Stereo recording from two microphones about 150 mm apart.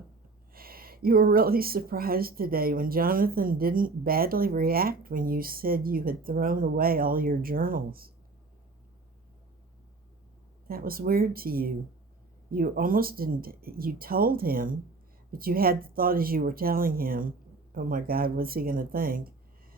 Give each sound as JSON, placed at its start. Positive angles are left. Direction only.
{"t": 0.5, "sound": "a woman's voice", "side_deg": -80}
{"t": 10.7, "sound": "a woman's voice", "side_deg": -80}